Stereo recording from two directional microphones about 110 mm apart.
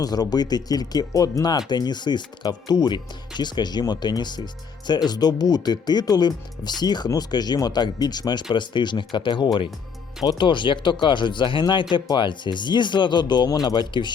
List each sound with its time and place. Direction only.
0.0 s speech: 35° left (ahead or behind)